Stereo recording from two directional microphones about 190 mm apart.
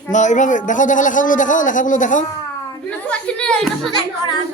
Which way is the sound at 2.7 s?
5° left (ahead or behind).